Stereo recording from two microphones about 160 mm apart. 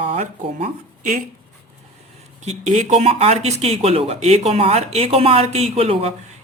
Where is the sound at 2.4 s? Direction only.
45° right (ahead or behind).